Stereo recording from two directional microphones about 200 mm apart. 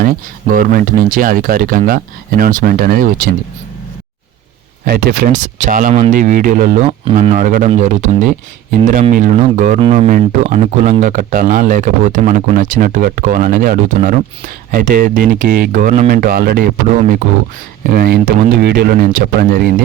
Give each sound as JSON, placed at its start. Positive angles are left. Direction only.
{"t": 0.0, "sound": "speech", "side_deg": -45}
{"t": 4.9, "sound": "speech", "side_deg": -50}
{"t": 17.8, "sound": "speech", "side_deg": -50}